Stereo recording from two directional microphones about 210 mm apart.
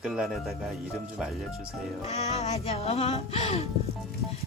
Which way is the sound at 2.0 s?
30° left (ahead or behind).